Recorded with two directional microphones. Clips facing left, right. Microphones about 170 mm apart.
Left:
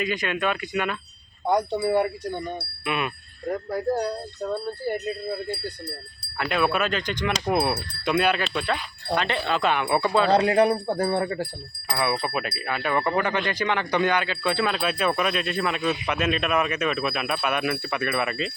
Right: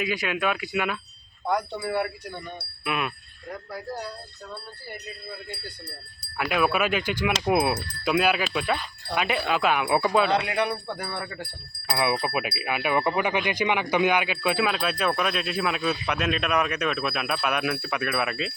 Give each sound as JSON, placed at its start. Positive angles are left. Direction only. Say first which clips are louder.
{"t": 0.0, "sound": "speech", "louder": "left 1 dB", "side_deg": -5}
{"t": 1.5, "sound": "speech", "louder": "left 5 dB", "side_deg": 30}
{"t": 2.6, "sound": "speech", "louder": "left 2 dB", "side_deg": 0}
{"t": 3.5, "sound": "wind chime", "louder": "left 9 dB", "side_deg": 50}
{"t": 6.3, "sound": "speech", "louder": "even", "side_deg": -10}
{"t": 8.0, "sound": "speech", "louder": "left 1 dB", "side_deg": -5}
{"t": 10.3, "sound": "speech", "louder": "left 6 dB", "side_deg": 40}
{"t": 11.9, "sound": "speech", "louder": "even", "side_deg": -15}